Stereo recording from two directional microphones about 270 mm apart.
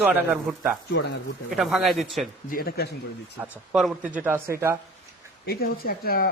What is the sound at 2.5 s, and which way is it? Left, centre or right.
Speech, left.